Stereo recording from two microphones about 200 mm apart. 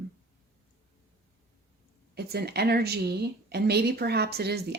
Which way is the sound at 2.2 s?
55° right (ahead or behind).